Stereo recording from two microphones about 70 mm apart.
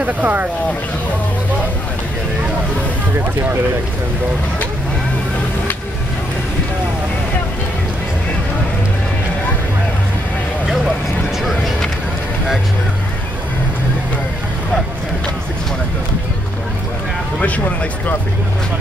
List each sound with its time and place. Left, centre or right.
0.0 s speech: right
17.4 s speech: centre